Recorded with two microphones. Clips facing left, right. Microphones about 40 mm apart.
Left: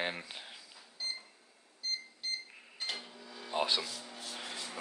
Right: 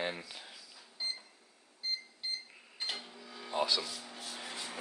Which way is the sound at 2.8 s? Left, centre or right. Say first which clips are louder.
Even; centre.